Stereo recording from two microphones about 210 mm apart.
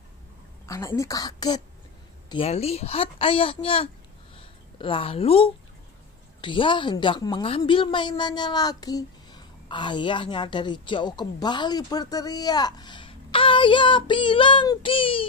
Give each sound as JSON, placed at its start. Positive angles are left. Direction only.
{"t": 0.7, "sound": "a woman's voice", "side_deg": 15}